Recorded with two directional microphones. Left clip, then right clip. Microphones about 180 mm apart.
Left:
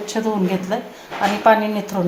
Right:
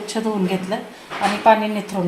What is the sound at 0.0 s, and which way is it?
A woman's voice, 5° left (ahead or behind).